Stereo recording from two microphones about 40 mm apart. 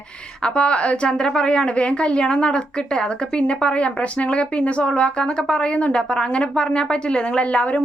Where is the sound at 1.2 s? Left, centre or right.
Centre.